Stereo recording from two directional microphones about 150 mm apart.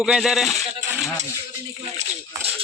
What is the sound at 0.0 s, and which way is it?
Speech, 5° right (ahead or behind).